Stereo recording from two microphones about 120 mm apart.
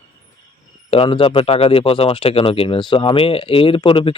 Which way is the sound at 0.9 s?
50° left (ahead or behind).